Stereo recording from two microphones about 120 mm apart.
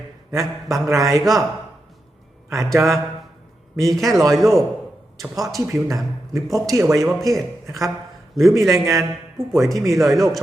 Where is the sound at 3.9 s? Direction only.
Centre (ahead or behind).